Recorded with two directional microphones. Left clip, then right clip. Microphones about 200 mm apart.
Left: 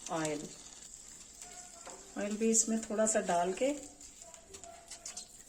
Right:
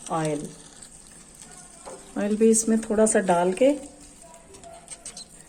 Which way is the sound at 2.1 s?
20° right (ahead or behind).